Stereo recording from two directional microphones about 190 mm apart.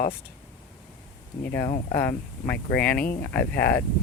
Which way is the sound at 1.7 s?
50° left (ahead or behind).